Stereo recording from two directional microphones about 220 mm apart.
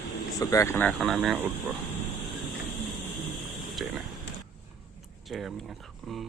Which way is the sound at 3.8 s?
Centre (ahead or behind).